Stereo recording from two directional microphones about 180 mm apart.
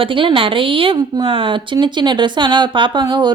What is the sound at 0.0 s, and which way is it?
A woman's voice, 30° right (ahead or behind).